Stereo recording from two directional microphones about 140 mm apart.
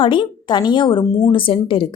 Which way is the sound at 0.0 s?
35° left (ahead or behind).